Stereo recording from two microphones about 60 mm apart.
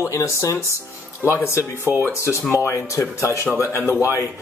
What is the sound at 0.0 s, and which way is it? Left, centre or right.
Speech, left.